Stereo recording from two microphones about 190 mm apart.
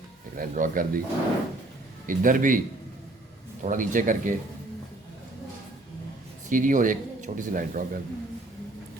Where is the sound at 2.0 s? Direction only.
45° right (ahead or behind).